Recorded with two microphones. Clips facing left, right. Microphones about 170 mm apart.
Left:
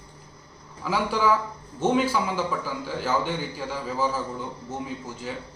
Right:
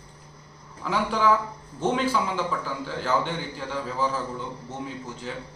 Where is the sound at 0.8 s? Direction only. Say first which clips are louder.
Even; 5° left (ahead or behind).